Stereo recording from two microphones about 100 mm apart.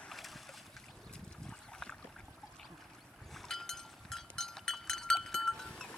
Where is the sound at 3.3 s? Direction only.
5° left (ahead or behind).